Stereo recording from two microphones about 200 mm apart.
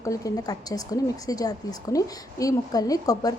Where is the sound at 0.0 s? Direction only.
15° left (ahead or behind).